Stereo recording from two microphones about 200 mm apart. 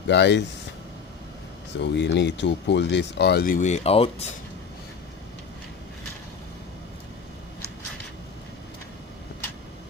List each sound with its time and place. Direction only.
0.1 s speech: 60° left (ahead or behind)
1.8 s speech: 60° left (ahead or behind); by 4.3 s 30° left (ahead or behind)